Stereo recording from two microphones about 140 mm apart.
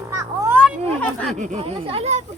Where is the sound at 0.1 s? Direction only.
20° right (ahead or behind).